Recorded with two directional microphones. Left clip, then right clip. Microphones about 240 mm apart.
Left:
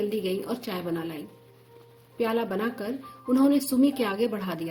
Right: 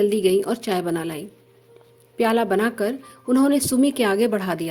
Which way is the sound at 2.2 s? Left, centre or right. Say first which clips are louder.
Right 8 dB; right.